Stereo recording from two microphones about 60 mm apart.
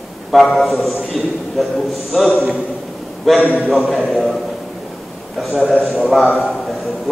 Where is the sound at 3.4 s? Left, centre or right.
Left.